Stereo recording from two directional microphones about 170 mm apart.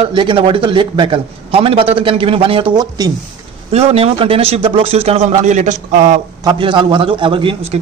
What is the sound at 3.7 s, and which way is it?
A man's voice, 35° right (ahead or behind).